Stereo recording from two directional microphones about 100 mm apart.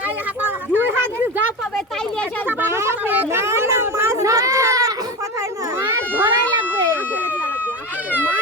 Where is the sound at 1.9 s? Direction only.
10° left (ahead or behind).